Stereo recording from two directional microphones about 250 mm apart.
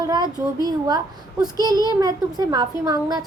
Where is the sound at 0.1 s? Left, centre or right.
Centre.